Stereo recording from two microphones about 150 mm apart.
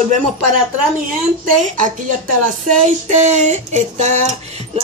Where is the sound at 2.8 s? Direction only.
55° right (ahead or behind).